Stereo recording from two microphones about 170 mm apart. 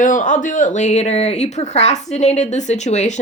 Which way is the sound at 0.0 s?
50° left (ahead or behind).